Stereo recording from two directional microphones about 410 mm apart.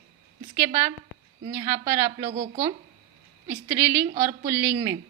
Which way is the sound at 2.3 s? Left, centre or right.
Centre.